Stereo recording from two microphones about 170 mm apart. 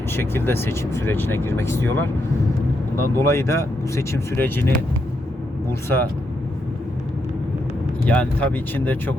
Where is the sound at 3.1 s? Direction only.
15° left (ahead or behind).